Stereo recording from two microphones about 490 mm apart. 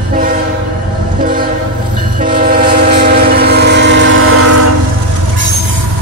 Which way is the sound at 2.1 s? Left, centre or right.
Centre.